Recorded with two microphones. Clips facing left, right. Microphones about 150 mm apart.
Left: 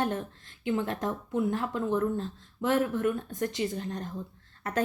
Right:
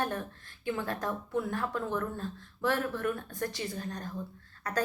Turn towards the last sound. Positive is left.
turn(degrees=25)  # may be behind; listen again after turning